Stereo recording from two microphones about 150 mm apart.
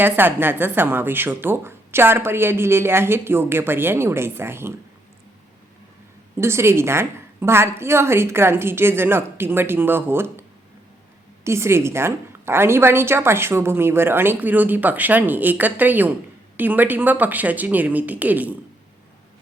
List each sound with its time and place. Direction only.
0.0 s a woman's voice: 15° right (ahead or behind)
6.3 s a woman's voice: 15° right (ahead or behind)
11.4 s a woman's voice: 20° right (ahead or behind)